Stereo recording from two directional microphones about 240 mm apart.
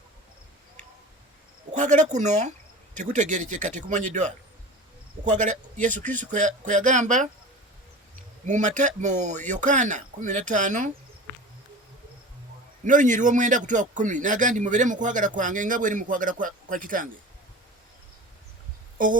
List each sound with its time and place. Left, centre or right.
1.7 s a man's voice: right
8.4 s a man's voice: right
12.8 s a man's voice: right